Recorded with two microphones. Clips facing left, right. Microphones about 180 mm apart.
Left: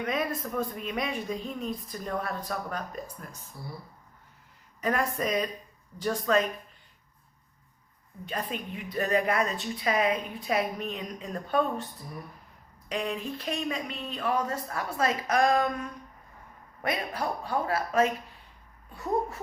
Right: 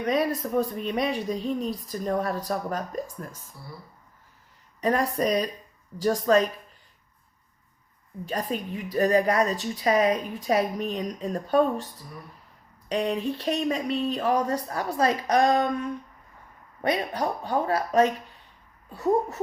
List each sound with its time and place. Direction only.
0.0 s a woman's voice: 35° right (ahead or behind)
4.8 s a woman's voice: 35° right (ahead or behind)
8.2 s a woman's voice: 40° right (ahead or behind)
12.9 s a woman's voice: 35° right (ahead or behind)